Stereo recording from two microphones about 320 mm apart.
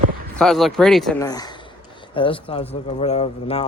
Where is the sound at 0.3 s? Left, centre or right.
Centre.